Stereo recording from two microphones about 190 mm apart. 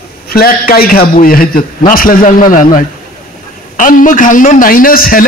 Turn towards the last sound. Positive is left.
turn(degrees=50)  # may be behind; listen again after turning